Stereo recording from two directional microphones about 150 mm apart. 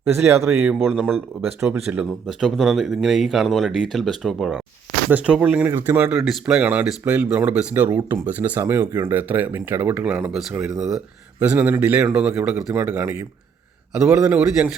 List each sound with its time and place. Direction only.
0.2 s speech: 20° right (ahead or behind)
0.7 s speech: centre (ahead or behind)
2.0 s speech: centre (ahead or behind)